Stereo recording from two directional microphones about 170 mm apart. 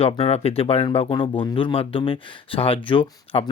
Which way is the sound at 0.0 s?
35° left (ahead or behind).